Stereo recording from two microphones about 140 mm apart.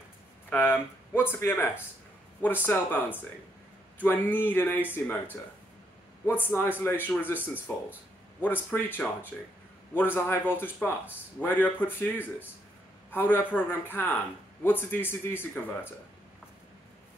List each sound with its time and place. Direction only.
0.5 s speech: 15° left (ahead or behind)
8.4 s speech: 15° left (ahead or behind)